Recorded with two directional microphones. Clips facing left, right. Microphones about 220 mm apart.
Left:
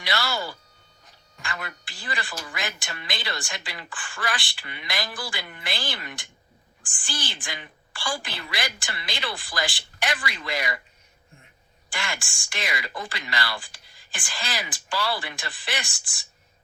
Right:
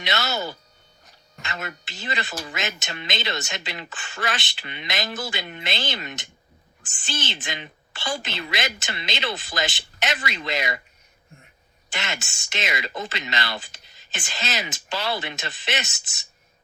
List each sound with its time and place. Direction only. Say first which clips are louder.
0.0 s a sound: right 2 dB; 20° right (ahead or behind)
1.4 s speech: right 2 dB; 25° right (ahead or behind)
11.9 s speech: right 1 dB; 25° right (ahead or behind)